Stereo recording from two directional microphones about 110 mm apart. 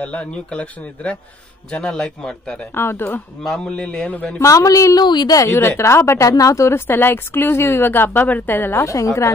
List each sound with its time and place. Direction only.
0.0 s speech: 10° left (ahead or behind)
2.7 s speech: 20° left (ahead or behind)
3.4 s speech: 5° left (ahead or behind)
4.4 s speech: 30° left (ahead or behind)
8.8 s speech: 30° left (ahead or behind)